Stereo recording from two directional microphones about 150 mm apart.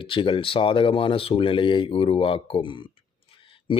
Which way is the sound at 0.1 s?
35° left (ahead or behind).